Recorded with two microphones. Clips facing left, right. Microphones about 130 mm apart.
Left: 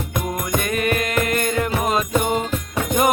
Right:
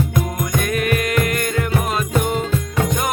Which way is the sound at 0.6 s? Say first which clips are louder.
Right 3 dB; centre (ahead or behind).